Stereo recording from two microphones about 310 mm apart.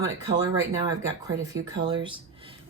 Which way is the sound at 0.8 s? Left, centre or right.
Centre.